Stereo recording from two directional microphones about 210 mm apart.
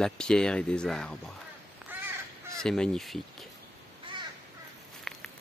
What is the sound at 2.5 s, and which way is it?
Speech, 5° left (ahead or behind).